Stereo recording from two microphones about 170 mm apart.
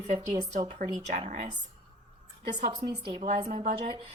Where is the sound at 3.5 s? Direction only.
40° right (ahead or behind).